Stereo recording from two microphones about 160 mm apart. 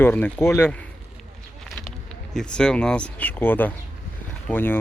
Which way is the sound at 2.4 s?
5° left (ahead or behind).